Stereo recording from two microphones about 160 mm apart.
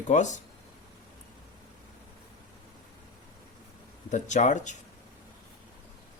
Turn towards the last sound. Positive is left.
turn(degrees=50)  # may be behind; listen again after turning